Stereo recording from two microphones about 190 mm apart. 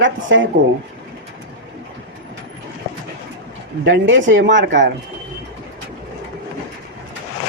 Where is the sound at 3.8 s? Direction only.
70° right (ahead or behind).